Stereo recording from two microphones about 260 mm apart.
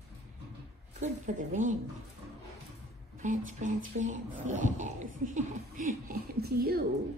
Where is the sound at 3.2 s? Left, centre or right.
Right.